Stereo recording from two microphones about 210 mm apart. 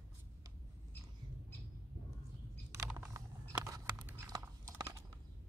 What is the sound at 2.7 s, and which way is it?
Typing, 15° right (ahead or behind).